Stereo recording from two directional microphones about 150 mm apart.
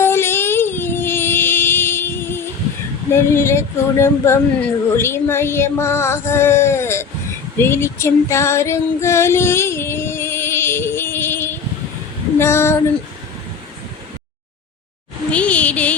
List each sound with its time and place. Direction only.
0.0 s child singing: 15° left (ahead or behind)
3.2 s speech: 15° left (ahead or behind)
7.6 s female singing: 15° left (ahead or behind)
12.4 s speech: 15° left (ahead or behind)
15.3 s a sound: 10° left (ahead or behind)